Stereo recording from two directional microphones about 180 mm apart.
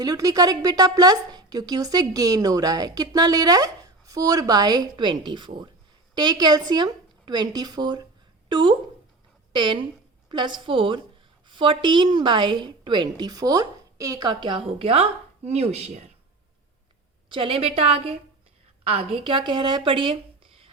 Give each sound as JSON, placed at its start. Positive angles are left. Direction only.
{"t": 0.0, "sound": "speech", "side_deg": -20}
{"t": 17.2, "sound": "a woman's voice", "side_deg": -30}